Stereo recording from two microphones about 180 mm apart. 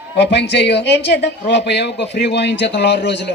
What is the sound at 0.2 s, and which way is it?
Speech, 75° left (ahead or behind).